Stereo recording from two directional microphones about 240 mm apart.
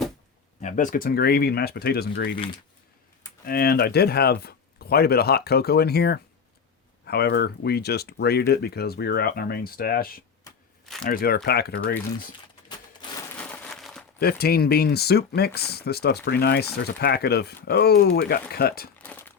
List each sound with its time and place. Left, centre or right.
0.6 s speech: left
3.4 s speech: left
10.8 s crumpling: centre
11.1 s speech: left
13.2 s a sound: centre
14.2 s speech: left
18.9 s a sound: centre